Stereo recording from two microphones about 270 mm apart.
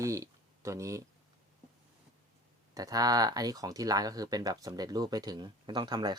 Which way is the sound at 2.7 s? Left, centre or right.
Centre.